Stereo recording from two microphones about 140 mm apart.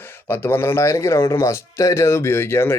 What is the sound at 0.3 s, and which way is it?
A man's voice, 15° left (ahead or behind).